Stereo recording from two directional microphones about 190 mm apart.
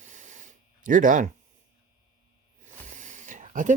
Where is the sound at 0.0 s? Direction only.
40° right (ahead or behind).